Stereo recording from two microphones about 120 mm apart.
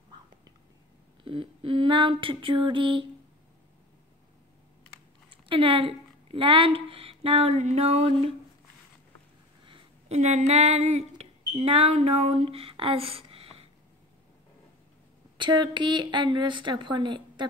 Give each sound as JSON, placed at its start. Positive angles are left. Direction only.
{"t": 1.2, "sound": "speech", "side_deg": -45}
{"t": 5.5, "sound": "speech", "side_deg": -50}
{"t": 10.0, "sound": "speech", "side_deg": -70}
{"t": 15.3, "sound": "a woman's voice", "side_deg": -40}